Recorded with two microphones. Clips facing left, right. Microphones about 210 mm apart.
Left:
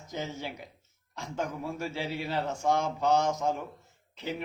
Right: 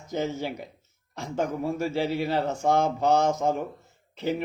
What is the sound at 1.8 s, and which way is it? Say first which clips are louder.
Speech: right 8 dB; 55° right (ahead or behind).